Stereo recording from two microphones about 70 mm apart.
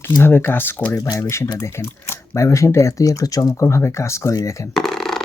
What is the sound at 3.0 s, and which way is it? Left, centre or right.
Speech, left.